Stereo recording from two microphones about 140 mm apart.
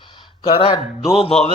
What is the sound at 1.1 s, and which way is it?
Music, 45° left (ahead or behind).